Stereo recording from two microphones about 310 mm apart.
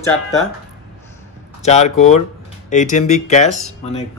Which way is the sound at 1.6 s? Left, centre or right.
Left.